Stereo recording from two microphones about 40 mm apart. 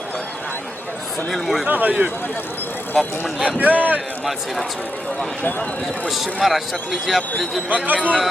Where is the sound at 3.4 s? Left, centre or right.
Right.